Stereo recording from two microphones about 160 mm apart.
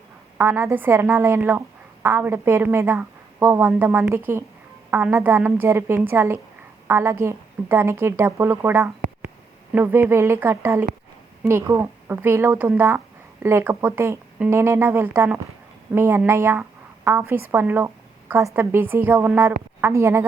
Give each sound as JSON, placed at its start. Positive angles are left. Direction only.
{"t": 0.3, "sound": "a woman's voice", "side_deg": -15}